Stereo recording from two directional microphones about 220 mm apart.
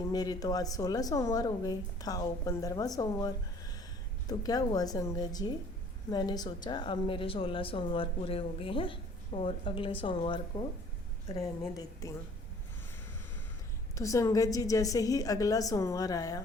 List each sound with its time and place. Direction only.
0.0 s a woman's voice: 15° left (ahead or behind)
13.9 s a woman's voice: 15° left (ahead or behind)